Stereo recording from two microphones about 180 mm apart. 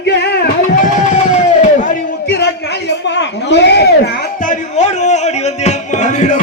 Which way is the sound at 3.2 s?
75° left (ahead or behind).